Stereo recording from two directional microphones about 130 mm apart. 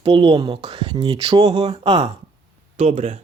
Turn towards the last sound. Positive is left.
turn(degrees=-70)  # may be behind; listen again after turning